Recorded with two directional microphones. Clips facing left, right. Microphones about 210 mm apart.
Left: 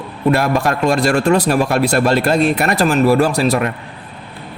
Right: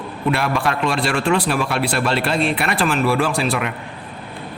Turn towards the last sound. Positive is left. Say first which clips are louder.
# left 5 dB
turn(degrees=40)  # may be behind; listen again after turning